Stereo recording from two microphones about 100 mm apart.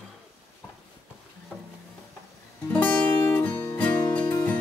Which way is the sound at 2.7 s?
15° left (ahead or behind).